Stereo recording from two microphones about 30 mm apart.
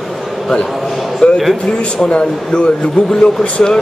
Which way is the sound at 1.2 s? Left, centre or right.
Left.